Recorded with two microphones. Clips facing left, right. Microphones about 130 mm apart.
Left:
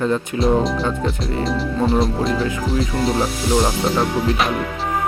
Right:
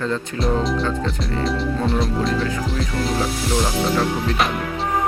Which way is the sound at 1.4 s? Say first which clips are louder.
Left 2 dB; centre (ahead or behind).